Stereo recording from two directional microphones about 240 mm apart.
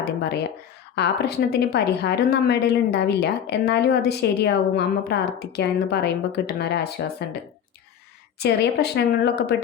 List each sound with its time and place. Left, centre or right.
0.0 s a woman's voice: left
8.4 s a woman's voice: left